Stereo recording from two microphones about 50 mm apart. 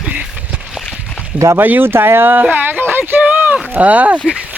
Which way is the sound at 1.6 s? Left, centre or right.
Right.